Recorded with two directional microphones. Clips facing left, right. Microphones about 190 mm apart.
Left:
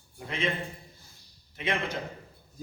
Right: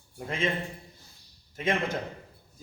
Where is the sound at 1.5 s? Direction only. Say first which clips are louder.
Right 3 dB; 45° right (ahead or behind).